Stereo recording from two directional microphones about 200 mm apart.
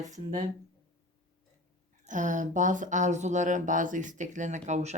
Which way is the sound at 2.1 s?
40° right (ahead or behind).